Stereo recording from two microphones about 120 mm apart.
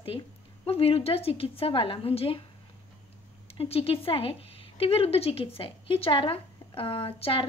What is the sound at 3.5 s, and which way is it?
A woman's voice, 55° left (ahead or behind).